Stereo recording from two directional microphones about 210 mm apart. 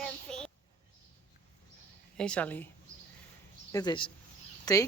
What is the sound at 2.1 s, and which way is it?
Speech, 5° left (ahead or behind).